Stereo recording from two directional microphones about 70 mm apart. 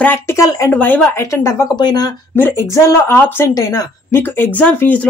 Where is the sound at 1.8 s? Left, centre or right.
Left.